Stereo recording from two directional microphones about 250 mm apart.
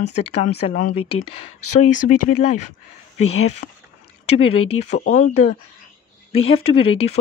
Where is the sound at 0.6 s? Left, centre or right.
Left.